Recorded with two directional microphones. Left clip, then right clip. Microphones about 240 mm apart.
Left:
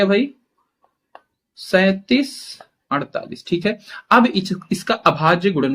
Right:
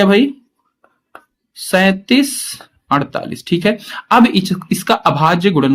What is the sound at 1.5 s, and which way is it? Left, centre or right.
Speech, right.